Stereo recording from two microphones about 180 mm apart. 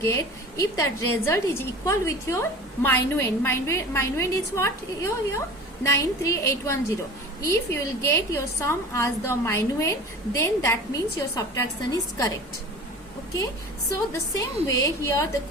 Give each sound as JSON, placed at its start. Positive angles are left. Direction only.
{"t": 0.0, "sound": "a woman's voice", "side_deg": 15}
{"t": 14.1, "sound": "a woman's voice", "side_deg": 15}